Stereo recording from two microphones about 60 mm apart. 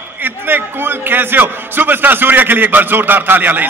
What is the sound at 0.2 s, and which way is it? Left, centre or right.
A man's voice, right.